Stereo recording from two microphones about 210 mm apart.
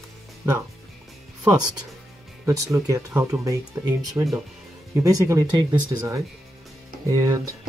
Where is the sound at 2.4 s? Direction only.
15° right (ahead or behind).